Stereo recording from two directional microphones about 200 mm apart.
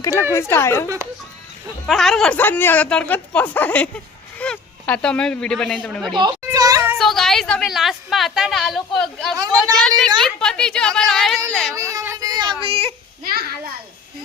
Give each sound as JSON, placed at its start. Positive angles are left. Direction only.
{"t": 0.0, "sound": "speech", "side_deg": 15}
{"t": 1.9, "sound": "speech", "side_deg": 0}
{"t": 6.1, "sound": "a sound", "side_deg": -20}
{"t": 7.0, "sound": "a woman's voice", "side_deg": 0}
{"t": 9.3, "sound": "a woman's voice", "side_deg": -15}
{"t": 10.2, "sound": "a woman's voice", "side_deg": 5}
{"t": 11.7, "sound": "a sound", "side_deg": -15}
{"t": 12.6, "sound": "speech", "side_deg": -30}